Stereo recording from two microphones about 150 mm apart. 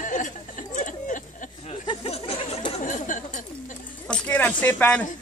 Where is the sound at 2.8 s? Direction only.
60° left (ahead or behind).